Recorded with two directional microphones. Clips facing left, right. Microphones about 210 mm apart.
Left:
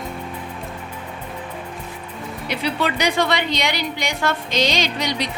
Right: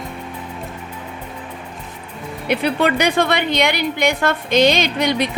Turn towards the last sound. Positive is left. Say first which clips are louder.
# right 5 dB
turn(degrees=-55)  # may be behind; listen again after turning